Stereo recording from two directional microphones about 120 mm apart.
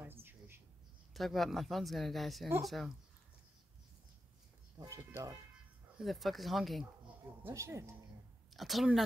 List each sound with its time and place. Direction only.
0.0 s a sound: 15° right (ahead or behind)
1.1 s speech: centre (ahead or behind)
4.7 s speech: 30° right (ahead or behind)
5.9 s speech: centre (ahead or behind)
7.4 s speech: 25° right (ahead or behind)
8.5 s speech: centre (ahead or behind)